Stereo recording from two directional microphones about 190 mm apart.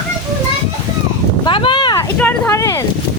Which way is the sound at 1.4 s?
25° left (ahead or behind).